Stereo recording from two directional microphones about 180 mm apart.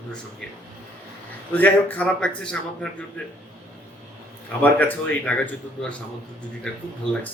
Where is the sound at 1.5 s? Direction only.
10° left (ahead or behind).